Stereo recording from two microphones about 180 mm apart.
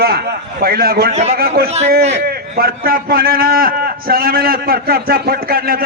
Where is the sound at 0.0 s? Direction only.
60° right (ahead or behind).